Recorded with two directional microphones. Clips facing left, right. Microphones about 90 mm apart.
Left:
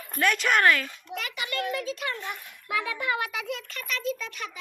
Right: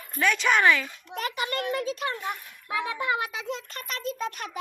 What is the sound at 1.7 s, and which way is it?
A child's voice, 35° right (ahead or behind).